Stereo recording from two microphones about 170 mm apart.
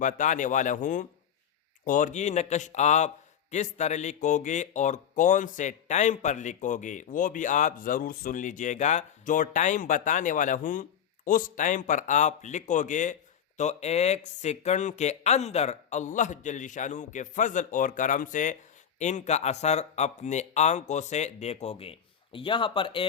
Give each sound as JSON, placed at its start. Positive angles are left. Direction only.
{"t": 0.0, "sound": "speech", "side_deg": 50}